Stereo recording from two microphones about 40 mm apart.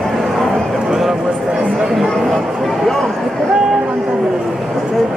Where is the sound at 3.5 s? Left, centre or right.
Right.